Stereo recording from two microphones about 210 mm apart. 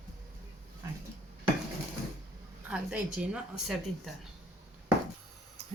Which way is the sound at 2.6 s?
5° right (ahead or behind).